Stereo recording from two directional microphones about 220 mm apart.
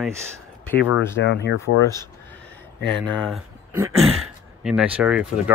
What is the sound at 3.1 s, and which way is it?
Speech, 5° left (ahead or behind).